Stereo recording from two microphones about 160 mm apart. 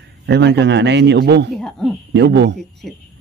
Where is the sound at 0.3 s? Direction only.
90° right.